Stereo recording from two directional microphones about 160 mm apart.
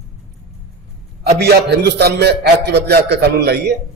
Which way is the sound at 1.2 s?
90° right.